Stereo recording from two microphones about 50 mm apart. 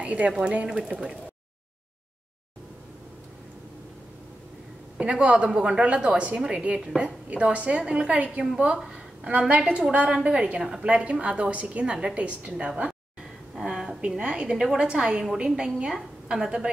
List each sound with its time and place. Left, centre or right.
0.0 s speech: right
0.3 s a woman's voice: centre
4.9 s a woman's voice: right
8.7 s a sound: centre
9.3 s a woman's voice: right